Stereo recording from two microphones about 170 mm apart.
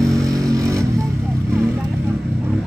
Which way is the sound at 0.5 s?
20° right (ahead or behind).